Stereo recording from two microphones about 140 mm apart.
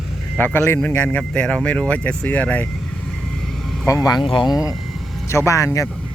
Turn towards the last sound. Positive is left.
turn(degrees=20)  # may be behind; listen again after turning